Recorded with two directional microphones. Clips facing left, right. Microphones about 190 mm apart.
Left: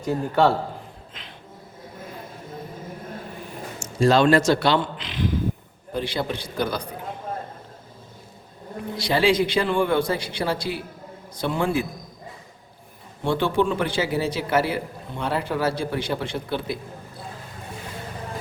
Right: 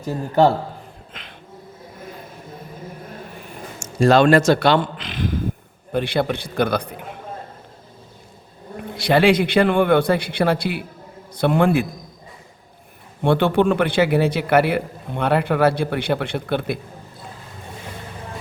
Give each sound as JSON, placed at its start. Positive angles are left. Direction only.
{"t": 4.0, "sound": "a man's voice", "side_deg": -60}
{"t": 5.9, "sound": "a man's voice", "side_deg": -65}
{"t": 9.0, "sound": "a man's voice", "side_deg": -60}
{"t": 13.2, "sound": "a man's voice", "side_deg": -60}